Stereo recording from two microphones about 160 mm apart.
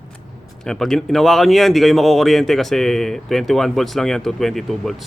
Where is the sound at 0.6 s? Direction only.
5° left (ahead or behind).